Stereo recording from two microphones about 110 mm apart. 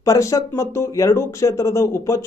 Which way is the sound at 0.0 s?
30° left (ahead or behind).